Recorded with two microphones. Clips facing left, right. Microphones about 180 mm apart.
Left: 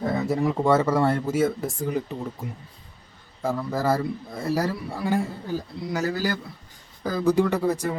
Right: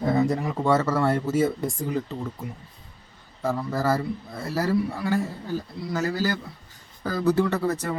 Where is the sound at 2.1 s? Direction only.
15° left (ahead or behind).